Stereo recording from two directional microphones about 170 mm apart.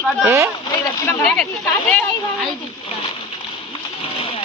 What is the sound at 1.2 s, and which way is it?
Speech, 5° left (ahead or behind).